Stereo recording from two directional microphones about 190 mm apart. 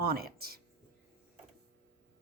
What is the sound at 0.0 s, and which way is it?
Speech, 55° right (ahead or behind).